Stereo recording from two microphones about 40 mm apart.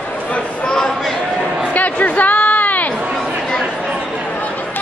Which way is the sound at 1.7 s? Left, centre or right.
Left.